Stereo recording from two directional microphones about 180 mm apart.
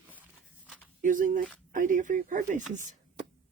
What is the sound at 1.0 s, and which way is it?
Speech, 45° right (ahead or behind).